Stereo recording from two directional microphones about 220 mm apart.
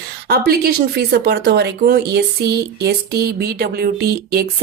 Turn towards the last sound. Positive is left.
turn(degrees=-45)  # may be behind; listen again after turning